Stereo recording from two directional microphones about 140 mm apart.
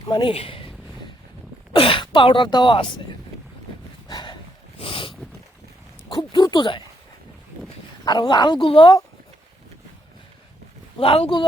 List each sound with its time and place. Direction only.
0.1 s a sound: 35° left (ahead or behind)
1.7 s speech: 40° left (ahead or behind)
4.1 s a sound: 35° left (ahead or behind)
4.8 s dog: 40° left (ahead or behind)
6.1 s speech: 30° left (ahead or behind)
8.0 s speech: 30° left (ahead or behind)
10.9 s speech: 40° left (ahead or behind)